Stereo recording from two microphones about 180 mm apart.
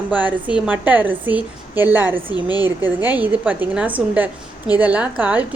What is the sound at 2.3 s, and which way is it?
Speech, 20° left (ahead or behind).